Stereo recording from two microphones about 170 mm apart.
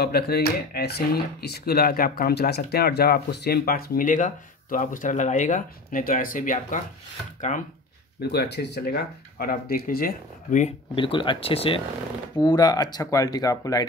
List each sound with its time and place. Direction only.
0.0 s speech: 65° left (ahead or behind); by 7.6 s 45° left (ahead or behind)
8.2 s speech: 70° left (ahead or behind); by 10.7 s 50° left (ahead or behind)
11.0 s speech: 30° left (ahead or behind)
12.4 s speech: 25° left (ahead or behind)